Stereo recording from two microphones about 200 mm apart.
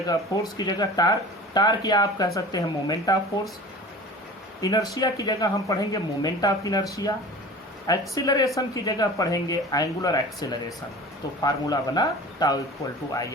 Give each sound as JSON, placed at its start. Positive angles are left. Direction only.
{"t": 0.5, "sound": "speech", "side_deg": 20}
{"t": 4.6, "sound": "speech", "side_deg": 20}